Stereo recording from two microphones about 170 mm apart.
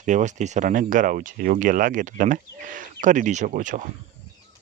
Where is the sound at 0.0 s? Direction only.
45° right (ahead or behind).